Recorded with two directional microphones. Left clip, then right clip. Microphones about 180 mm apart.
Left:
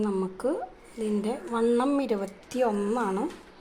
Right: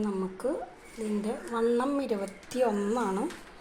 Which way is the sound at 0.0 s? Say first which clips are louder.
Left 3 dB; 25° left (ahead or behind).